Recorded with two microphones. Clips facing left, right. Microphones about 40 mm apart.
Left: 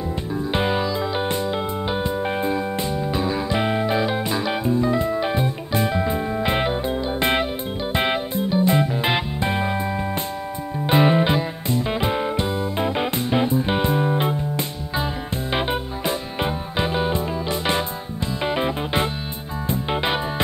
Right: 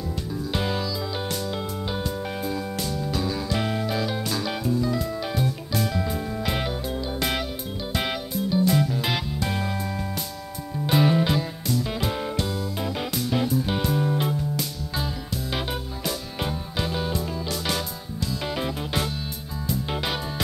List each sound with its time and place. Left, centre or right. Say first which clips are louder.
0.5 s music: left 6 dB; left
10.9 s music: left 4 dB; left
15.5 s music: left 8 dB; left